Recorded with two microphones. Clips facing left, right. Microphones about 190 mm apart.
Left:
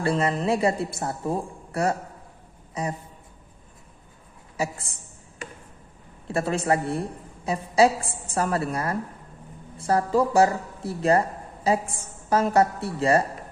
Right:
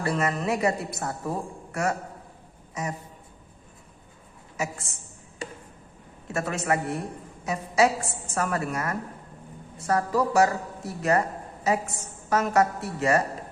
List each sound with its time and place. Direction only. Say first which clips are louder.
0.0 s a man's voice: left 3 dB; 30° left (ahead or behind)
4.5 s a woman's voice: left 3 dB; 30° left (ahead or behind)
6.2 s a woman's voice: left 3 dB; 30° left (ahead or behind)